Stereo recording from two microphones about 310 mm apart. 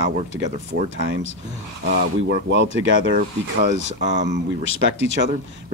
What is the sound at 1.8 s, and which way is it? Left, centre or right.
A man's voice, right.